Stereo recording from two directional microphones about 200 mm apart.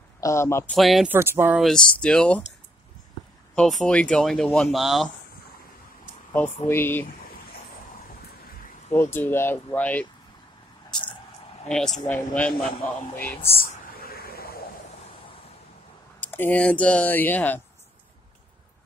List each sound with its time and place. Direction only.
0.2 s speech: 15° left (ahead or behind)
0.7 s speech: centre (ahead or behind)
1.1 s speech: 10° right (ahead or behind)
1.6 s speech: centre (ahead or behind)
3.5 s speech: 5° left (ahead or behind)
6.3 s speech: 10° left (ahead or behind)
8.9 s speech: 10° left (ahead or behind)
12.1 s speech: 5° left (ahead or behind)
13.6 s a sound: 50° left (ahead or behind)
16.2 s speech: 10° left (ahead or behind)